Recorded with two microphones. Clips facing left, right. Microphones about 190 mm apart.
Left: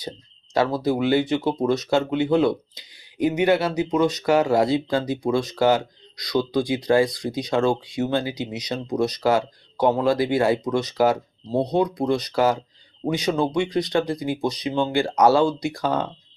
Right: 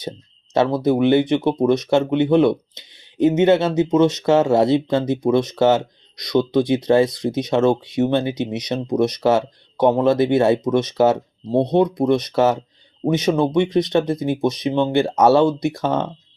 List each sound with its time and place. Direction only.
0.5 s speech: 25° right (ahead or behind)